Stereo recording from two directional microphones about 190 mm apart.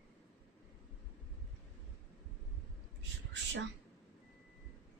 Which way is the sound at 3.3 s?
70° right (ahead or behind).